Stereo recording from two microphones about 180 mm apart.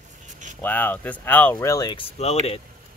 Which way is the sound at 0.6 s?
10° left (ahead or behind).